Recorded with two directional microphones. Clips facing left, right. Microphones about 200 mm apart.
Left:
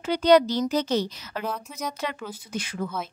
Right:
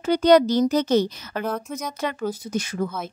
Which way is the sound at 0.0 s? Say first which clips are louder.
Right 3 dB; 45° right (ahead or behind).